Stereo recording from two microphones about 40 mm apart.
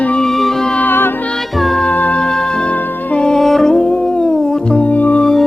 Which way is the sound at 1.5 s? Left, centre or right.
Centre.